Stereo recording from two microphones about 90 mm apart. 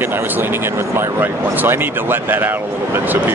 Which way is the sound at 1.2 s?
25° right (ahead or behind).